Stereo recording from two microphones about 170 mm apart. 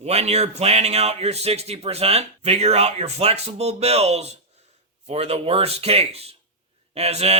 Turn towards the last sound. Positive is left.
turn(degrees=-40)  # may be behind; listen again after turning